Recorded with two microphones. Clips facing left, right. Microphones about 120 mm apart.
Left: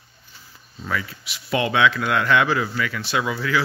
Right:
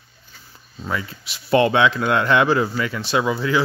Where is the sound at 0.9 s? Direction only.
30° right (ahead or behind).